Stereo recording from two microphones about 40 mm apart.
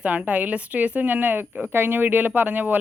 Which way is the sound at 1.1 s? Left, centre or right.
Right.